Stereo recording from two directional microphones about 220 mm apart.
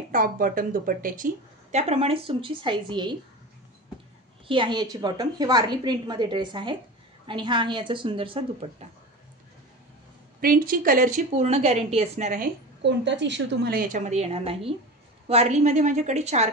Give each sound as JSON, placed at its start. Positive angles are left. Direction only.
{"t": 0.1, "sound": "a woman's voice", "side_deg": -40}
{"t": 4.5, "sound": "a woman's voice", "side_deg": -20}
{"t": 10.4, "sound": "speech", "side_deg": -40}
{"t": 12.8, "sound": "speech", "side_deg": -55}